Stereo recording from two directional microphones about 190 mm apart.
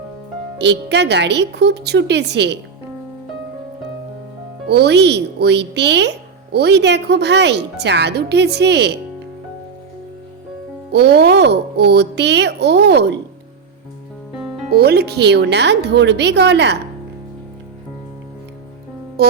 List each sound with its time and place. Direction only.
0.6 s speech: 65° right (ahead or behind)
4.6 s speech: 60° right (ahead or behind)
10.9 s speech: 60° right (ahead or behind)
14.7 s speech: 55° right (ahead or behind)
19.2 s music: 55° right (ahead or behind)